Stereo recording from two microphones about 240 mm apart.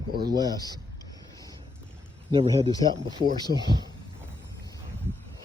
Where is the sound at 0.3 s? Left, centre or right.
Centre.